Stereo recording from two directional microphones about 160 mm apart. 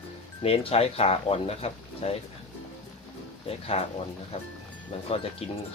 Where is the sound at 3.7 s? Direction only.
40° left (ahead or behind).